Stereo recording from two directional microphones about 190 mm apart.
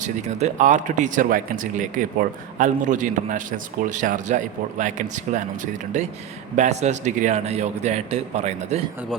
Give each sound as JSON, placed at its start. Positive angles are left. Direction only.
{"t": 0.0, "sound": "speech", "side_deg": -40}